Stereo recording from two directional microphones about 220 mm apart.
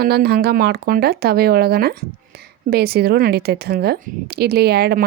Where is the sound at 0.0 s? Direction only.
45° right (ahead or behind).